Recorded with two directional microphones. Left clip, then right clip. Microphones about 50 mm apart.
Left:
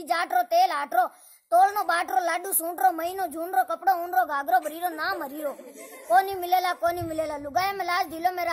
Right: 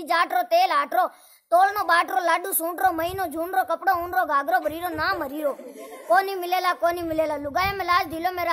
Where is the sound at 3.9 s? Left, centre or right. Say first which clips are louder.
Right 2 dB; right.